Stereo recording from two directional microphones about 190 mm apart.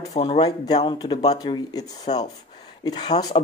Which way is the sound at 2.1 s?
30° left (ahead or behind).